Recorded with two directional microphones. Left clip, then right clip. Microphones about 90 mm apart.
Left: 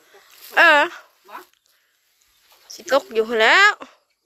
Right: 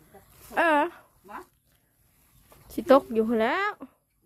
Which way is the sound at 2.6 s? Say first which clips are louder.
Even; 20° right (ahead or behind).